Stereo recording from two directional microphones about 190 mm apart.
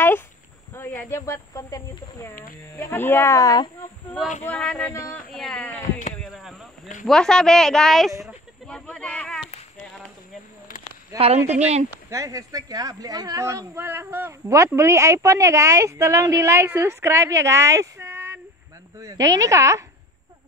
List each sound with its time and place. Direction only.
0.7 s a sound: 15° left (ahead or behind)
1.1 s speech: 15° left (ahead or behind)
4.5 s speech: 5° left (ahead or behind)
5.8 s speech: 40° left (ahead or behind)
6.2 s a sound: centre (ahead or behind)
7.1 s speech: 5° left (ahead or behind)
8.2 s a sound: centre (ahead or behind)
11.1 s a woman's voice: 35° right (ahead or behind)
12.1 s speech: 15° right (ahead or behind)